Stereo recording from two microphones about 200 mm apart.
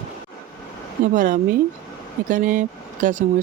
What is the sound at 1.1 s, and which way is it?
Speech, 40° right (ahead or behind).